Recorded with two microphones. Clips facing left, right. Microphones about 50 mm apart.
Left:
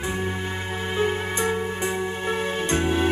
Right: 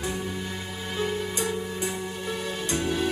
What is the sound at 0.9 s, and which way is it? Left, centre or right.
Music, left.